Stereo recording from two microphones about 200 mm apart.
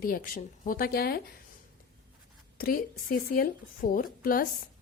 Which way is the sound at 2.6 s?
45° left (ahead or behind).